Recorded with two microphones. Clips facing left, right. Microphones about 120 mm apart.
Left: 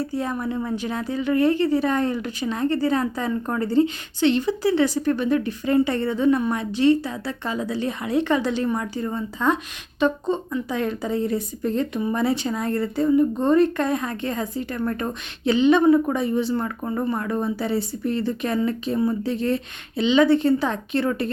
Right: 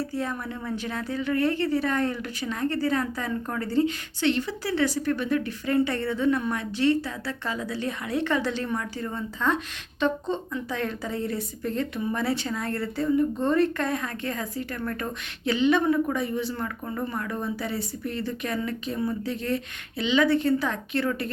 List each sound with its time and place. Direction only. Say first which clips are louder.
0.1 s a woman's voice: left 5 dB; 20° left (ahead or behind)